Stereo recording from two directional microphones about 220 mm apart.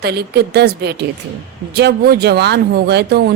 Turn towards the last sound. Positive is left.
turn(degrees=-45)  # may be behind; listen again after turning